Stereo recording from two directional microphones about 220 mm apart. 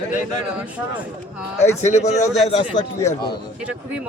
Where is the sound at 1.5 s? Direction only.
30° left (ahead or behind).